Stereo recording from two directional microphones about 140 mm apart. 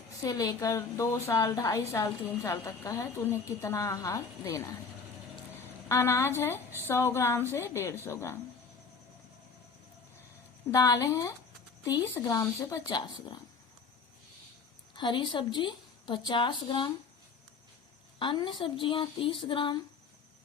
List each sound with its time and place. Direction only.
0.3 s a woman's voice: 25° left (ahead or behind)
5.9 s a woman's voice: 20° left (ahead or behind)
10.7 s a woman's voice: 25° left (ahead or behind)
14.9 s a woman's voice: 35° left (ahead or behind)
18.2 s a woman's voice: 35° left (ahead or behind)